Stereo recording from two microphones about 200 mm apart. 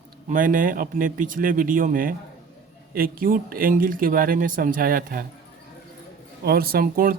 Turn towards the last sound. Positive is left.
turn(degrees=-45)  # may be behind; listen again after turning